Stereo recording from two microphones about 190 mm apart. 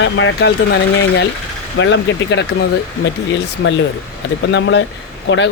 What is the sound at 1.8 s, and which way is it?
Speech, 75° left (ahead or behind).